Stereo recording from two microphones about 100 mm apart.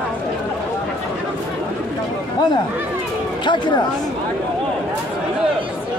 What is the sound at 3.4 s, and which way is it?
Speech, 50° left (ahead or behind).